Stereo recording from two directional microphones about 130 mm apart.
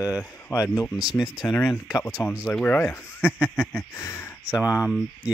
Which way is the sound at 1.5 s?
20° left (ahead or behind).